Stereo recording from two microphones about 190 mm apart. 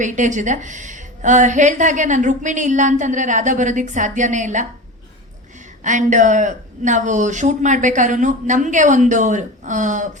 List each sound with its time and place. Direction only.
0.0 s a woman's voice: 40° right (ahead or behind)
5.8 s a woman's voice: 40° right (ahead or behind)